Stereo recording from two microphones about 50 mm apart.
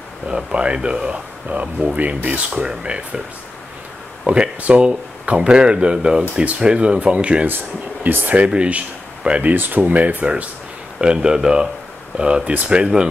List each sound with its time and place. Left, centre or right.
0.3 s speech: centre
2.6 s speech: centre
4.3 s speech: right
7.4 s speech: right
8.5 s speech: right
9.5 s speech: right; by 13.1 s centre